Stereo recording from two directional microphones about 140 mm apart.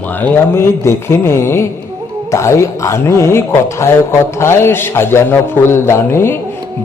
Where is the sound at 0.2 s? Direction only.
15° left (ahead or behind).